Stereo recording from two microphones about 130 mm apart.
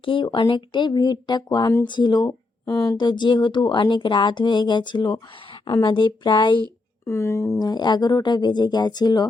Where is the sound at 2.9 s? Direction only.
35° left (ahead or behind).